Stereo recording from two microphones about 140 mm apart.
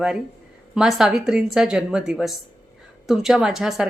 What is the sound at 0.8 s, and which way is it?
A woman's voice, 5° right (ahead or behind).